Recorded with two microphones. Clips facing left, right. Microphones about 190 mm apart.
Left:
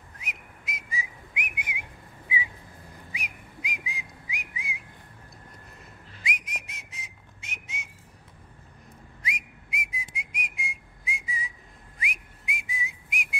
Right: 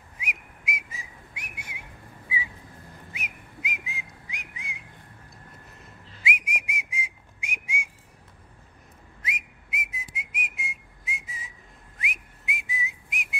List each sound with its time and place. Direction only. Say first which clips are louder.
0.2 s whistling: right 5 dB; 10° right (ahead or behind)
1.3 s whistling: left 7 dB; 15° left (ahead or behind)
3.1 s whistling: even; 5° right (ahead or behind)
5.8 s whistling: even; 5° right (ahead or behind)
9.2 s whistling: even; 5° right (ahead or behind)